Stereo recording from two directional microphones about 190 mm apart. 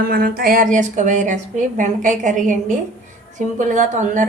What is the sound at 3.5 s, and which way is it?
Speech, 40° right (ahead or behind).